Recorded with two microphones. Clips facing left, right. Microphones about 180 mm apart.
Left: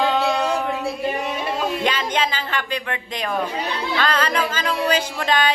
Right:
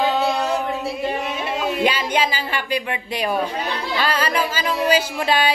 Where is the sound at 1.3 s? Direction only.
10° right (ahead or behind).